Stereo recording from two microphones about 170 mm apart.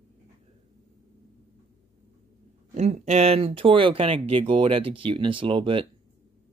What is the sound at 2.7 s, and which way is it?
Speech, 40° right (ahead or behind).